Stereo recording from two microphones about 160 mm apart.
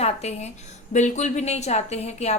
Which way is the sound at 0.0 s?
40° left (ahead or behind).